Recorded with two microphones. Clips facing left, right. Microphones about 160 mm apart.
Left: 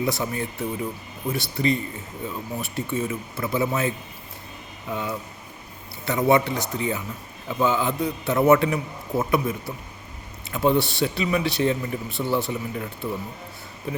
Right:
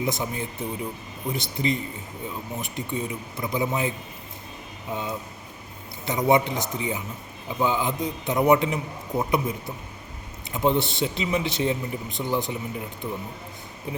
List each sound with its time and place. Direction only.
0.0 s a man's voice: 20° right (ahead or behind)